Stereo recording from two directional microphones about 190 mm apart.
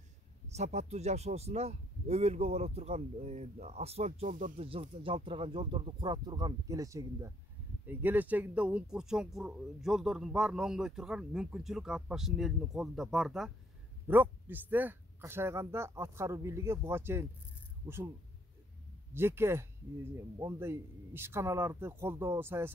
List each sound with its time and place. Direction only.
0.5 s speech: 35° right (ahead or behind)
4.6 s speech: 30° right (ahead or behind); by 18.1 s 10° right (ahead or behind)
19.1 s speech: 15° right (ahead or behind)